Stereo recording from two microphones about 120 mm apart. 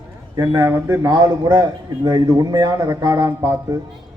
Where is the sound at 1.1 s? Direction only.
35° right (ahead or behind).